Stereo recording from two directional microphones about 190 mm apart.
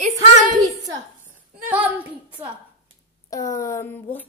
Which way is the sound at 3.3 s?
15° left (ahead or behind).